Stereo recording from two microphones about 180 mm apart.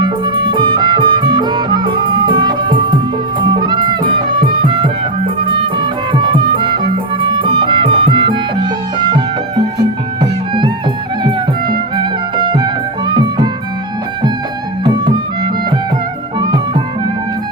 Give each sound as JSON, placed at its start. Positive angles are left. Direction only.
{"t": 0.0, "sound": "music", "side_deg": -25}
{"t": 10.2, "sound": "music", "side_deg": -25}
{"t": 12.5, "sound": "music", "side_deg": -25}
{"t": 16.4, "sound": "music", "side_deg": -25}